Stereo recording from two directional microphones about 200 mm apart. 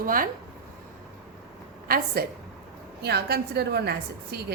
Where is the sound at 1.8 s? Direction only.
50° right (ahead or behind).